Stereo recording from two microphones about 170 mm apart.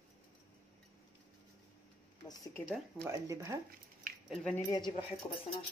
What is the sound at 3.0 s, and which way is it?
Speech, 20° right (ahead or behind).